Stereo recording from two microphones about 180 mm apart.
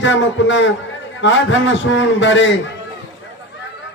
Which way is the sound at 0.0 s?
90° left.